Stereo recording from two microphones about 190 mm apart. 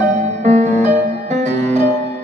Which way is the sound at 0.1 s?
35° right (ahead or behind).